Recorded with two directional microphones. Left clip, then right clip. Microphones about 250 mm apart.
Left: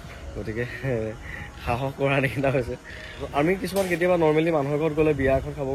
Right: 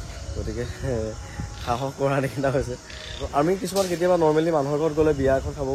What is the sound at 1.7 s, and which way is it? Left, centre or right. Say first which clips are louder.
Speech: right 1 dB; centre.